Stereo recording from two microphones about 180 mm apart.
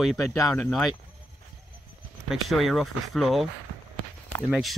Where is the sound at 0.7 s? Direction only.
Centre (ahead or behind).